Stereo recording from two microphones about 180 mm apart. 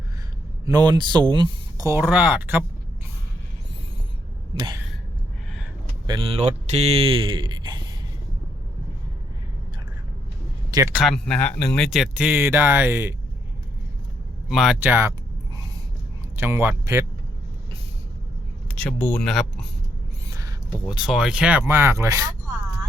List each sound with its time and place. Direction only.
0.6 s speech: 20° right (ahead or behind)
4.5 s a sound: 25° right (ahead or behind)
6.1 s speech: 35° right (ahead or behind)
10.7 s speech: 20° right (ahead or behind)
10.9 s speech: centre (ahead or behind); by 13.1 s 15° right (ahead or behind)
14.4 s speech: centre (ahead or behind)
16.3 s speech: 15° right (ahead or behind)
18.8 s speech: 10° left (ahead or behind)
20.3 s a sound: 20° right (ahead or behind)
20.9 s speech: 5° right (ahead or behind); by 22.3 s 20° right (ahead or behind)